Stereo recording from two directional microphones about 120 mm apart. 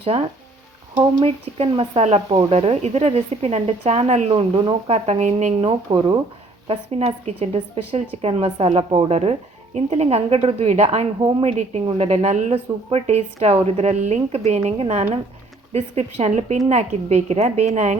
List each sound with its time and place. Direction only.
0.0 s a woman's voice: 55° right (ahead or behind); by 5.5 s 80° right
5.9 s speech: 40° right (ahead or behind)
6.7 s a woman's voice: 55° right (ahead or behind)
9.7 s a woman's voice: 60° right (ahead or behind)
11.2 s speech: 40° right (ahead or behind)
11.4 s a woman's voice: 65° right (ahead or behind)